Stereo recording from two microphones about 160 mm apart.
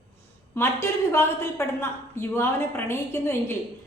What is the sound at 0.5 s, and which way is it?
A woman's voice, 15° left (ahead or behind).